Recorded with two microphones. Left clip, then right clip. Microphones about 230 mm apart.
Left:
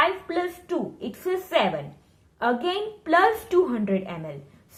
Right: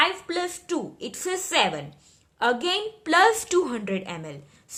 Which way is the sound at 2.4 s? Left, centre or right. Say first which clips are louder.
Right 1 dB; right.